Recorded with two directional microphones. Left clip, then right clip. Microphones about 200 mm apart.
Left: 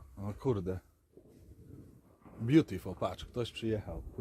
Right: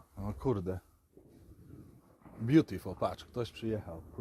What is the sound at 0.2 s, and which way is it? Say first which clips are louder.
Speech: even; 15° right (ahead or behind).